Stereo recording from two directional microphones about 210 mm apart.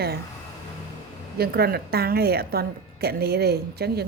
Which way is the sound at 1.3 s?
50° right (ahead or behind).